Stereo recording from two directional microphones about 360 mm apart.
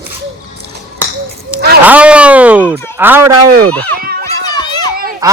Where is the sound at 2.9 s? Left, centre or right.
Centre.